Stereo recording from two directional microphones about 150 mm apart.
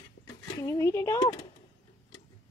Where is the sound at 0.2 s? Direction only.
20° left (ahead or behind).